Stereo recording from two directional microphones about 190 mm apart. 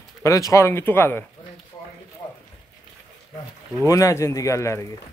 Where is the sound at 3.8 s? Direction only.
15° left (ahead or behind).